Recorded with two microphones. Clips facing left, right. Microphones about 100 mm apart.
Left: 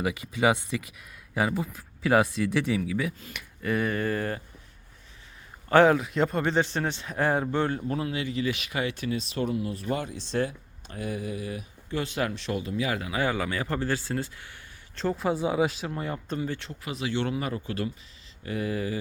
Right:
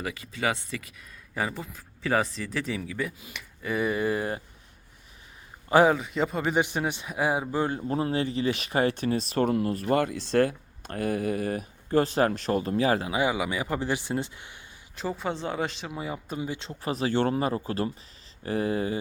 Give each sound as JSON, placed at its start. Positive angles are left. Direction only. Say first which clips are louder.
{"t": 0.0, "sound": "a man's voice", "louder": "left 5 dB", "side_deg": 15}
{"t": 5.6, "sound": "a man's voice", "louder": "left 1 dB", "side_deg": -5}
{"t": 7.7, "sound": "speech", "louder": "right 2 dB", "side_deg": -25}
{"t": 13.1, "sound": "a man's voice", "louder": "right 1 dB", "side_deg": -15}
{"t": 14.9, "sound": "a man's voice", "louder": "left 4 dB", "side_deg": 0}
{"t": 16.8, "sound": "speech", "louder": "right 5 dB", "side_deg": -40}